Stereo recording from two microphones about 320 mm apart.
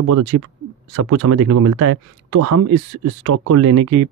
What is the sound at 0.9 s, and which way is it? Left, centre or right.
Speech, right.